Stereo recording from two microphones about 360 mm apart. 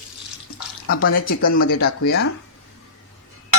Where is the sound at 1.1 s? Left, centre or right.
Left.